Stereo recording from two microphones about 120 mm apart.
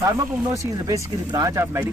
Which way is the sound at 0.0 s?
25° right (ahead or behind).